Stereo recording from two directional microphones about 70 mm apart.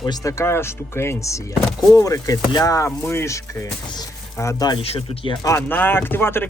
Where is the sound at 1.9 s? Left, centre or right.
Left.